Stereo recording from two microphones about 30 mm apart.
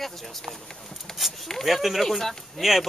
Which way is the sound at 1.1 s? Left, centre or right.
Centre.